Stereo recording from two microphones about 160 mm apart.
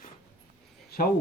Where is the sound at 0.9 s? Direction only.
75° left (ahead or behind).